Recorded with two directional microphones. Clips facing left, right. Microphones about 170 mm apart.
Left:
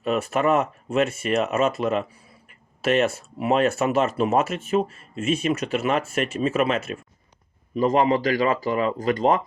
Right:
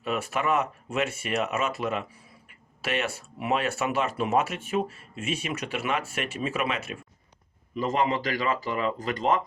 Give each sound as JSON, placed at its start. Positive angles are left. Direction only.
{"t": 0.0, "sound": "speech", "side_deg": 40}